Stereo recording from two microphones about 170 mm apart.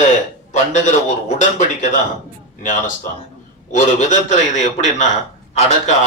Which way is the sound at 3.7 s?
45° left (ahead or behind).